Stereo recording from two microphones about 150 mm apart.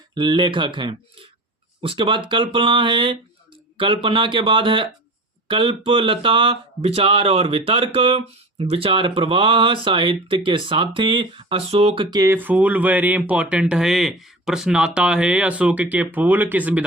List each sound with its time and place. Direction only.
0.1 s speech: 30° right (ahead or behind)
12.1 s speech: 20° right (ahead or behind)